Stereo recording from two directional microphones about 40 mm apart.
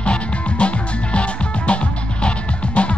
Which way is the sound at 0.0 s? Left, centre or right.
Left.